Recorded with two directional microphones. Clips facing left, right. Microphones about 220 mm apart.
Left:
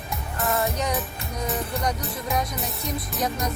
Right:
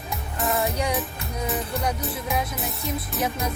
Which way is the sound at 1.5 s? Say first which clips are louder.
Even; 5° right (ahead or behind).